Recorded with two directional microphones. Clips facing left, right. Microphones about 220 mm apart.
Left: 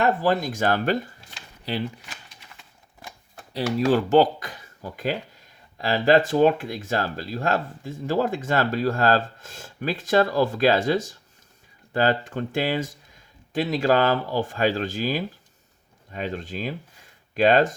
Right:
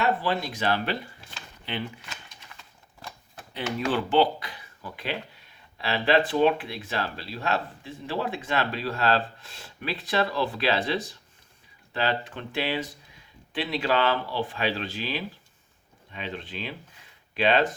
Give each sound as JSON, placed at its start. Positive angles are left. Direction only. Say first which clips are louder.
{"t": 0.0, "sound": "speech", "louder": "left 5 dB", "side_deg": 45}
{"t": 3.5, "sound": "speech", "louder": "left 6 dB", "side_deg": 40}